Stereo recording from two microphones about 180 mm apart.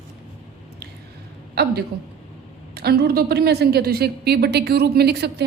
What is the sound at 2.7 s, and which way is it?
A woman's voice, 60° right (ahead or behind).